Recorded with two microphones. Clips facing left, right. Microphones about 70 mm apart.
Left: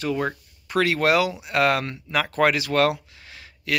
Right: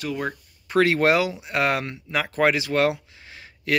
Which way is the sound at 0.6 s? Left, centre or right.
Right.